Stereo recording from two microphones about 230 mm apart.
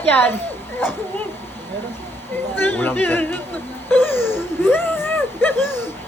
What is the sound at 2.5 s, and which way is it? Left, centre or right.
Speech, centre.